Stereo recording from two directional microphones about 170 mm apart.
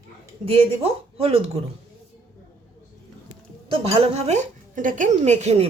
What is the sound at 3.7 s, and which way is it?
Speech, 35° right (ahead or behind).